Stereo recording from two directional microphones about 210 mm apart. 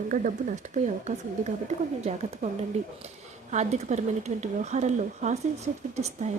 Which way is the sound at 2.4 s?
35° right (ahead or behind).